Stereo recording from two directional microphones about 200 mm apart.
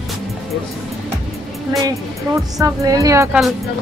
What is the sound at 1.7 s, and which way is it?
Speech, 15° right (ahead or behind).